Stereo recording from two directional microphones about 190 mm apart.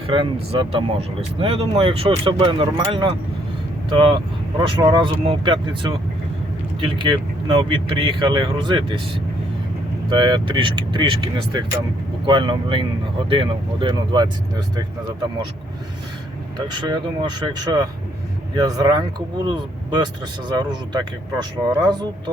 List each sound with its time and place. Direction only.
0.1 s speech: 25° right (ahead or behind)
10.1 s speech: 25° right (ahead or behind)
16.6 s speech: 20° right (ahead or behind)